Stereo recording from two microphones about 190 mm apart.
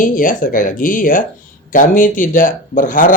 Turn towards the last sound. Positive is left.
turn(degrees=45)  # may be behind; listen again after turning